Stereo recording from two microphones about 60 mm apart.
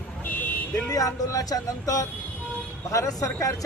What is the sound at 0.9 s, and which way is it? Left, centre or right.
Speech, left.